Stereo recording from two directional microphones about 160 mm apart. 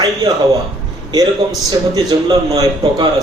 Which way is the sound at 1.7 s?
25° right (ahead or behind).